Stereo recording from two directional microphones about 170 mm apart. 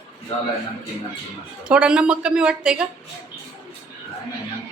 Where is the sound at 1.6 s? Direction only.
5° right (ahead or behind).